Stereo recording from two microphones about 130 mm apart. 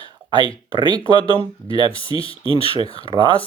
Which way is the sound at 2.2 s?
45° left (ahead or behind).